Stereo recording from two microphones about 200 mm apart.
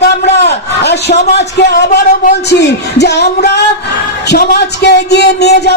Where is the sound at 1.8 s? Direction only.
45° left (ahead or behind).